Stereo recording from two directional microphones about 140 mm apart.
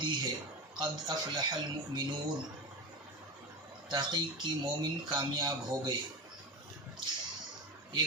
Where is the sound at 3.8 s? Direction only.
30° right (ahead or behind).